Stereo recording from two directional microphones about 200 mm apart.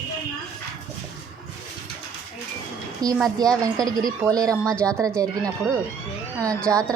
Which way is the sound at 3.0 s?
20° right (ahead or behind).